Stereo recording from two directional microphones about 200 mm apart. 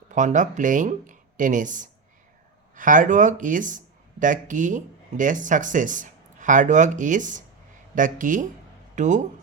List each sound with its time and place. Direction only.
0.1 s speech: 40° right (ahead or behind)